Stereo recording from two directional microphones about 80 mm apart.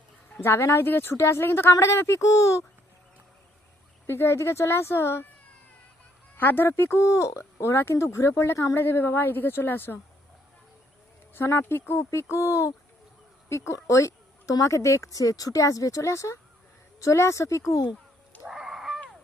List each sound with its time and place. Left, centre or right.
0.4 s speech: left
4.0 s speech: left
6.3 s a woman's voice: left
11.3 s a woman's voice: left
18.4 s a sound: centre